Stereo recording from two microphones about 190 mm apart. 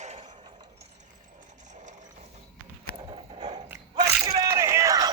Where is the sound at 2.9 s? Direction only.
30° right (ahead or behind).